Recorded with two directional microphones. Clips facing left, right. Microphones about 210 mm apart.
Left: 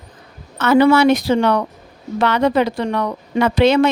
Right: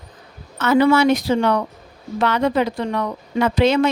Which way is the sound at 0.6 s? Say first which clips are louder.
Left 3 dB; 70° left (ahead or behind).